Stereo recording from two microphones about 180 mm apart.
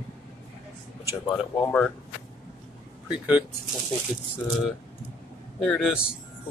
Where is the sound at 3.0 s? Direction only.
5° right (ahead or behind).